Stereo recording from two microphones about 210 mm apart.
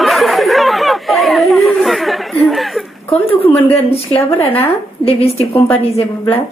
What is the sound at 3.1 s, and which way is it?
A woman's voice, 25° left (ahead or behind).